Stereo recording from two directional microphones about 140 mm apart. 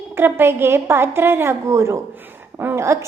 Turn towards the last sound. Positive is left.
turn(degrees=-20)  # may be behind; listen again after turning